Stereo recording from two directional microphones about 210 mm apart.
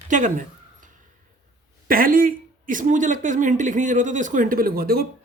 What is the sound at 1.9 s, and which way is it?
Speech, 45° right (ahead or behind).